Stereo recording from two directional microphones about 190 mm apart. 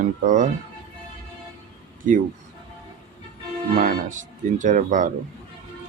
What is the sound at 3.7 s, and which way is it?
Speech, 50° right (ahead or behind).